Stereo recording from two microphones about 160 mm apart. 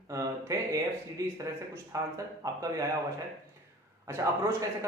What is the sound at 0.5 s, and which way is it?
Speech, 20° right (ahead or behind).